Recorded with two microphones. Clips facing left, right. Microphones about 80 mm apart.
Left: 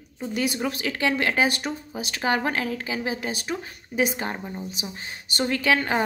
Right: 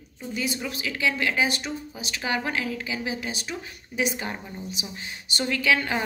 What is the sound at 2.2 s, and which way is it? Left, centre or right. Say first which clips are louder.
A woman's voice: left 3 dB; left.